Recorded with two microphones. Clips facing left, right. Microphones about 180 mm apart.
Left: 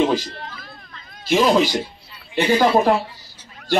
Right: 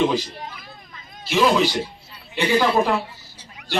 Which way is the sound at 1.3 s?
45° left (ahead or behind).